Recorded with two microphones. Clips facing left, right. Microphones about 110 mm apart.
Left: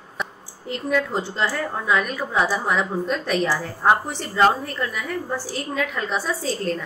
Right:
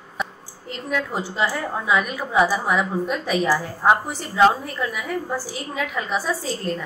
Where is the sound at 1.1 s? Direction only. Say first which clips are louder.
Even; 10° right (ahead or behind).